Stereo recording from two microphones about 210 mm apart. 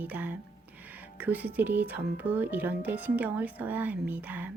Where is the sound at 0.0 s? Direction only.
10° right (ahead or behind).